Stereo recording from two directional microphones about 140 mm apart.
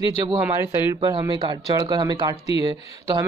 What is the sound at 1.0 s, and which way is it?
Speech, 35° right (ahead or behind).